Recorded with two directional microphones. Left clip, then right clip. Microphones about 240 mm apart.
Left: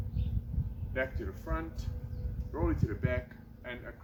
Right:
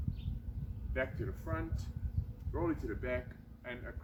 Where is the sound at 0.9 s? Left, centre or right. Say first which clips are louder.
Left 3 dB; centre.